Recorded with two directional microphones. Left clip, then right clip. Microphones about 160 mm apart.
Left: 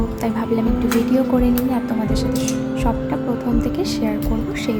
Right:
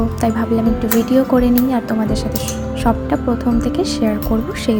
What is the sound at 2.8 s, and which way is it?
A woman's voice, 20° right (ahead or behind).